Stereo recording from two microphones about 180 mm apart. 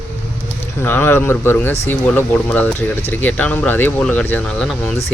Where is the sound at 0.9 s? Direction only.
10° left (ahead or behind).